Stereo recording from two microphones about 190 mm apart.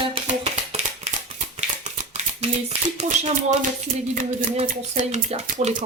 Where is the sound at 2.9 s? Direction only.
40° right (ahead or behind).